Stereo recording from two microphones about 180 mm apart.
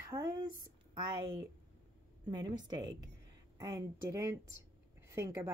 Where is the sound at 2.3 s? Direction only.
25° right (ahead or behind).